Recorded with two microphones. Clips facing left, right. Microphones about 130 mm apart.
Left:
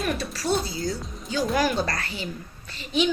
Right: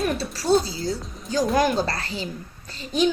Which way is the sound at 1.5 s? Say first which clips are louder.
Right 2 dB; 30° right (ahead or behind).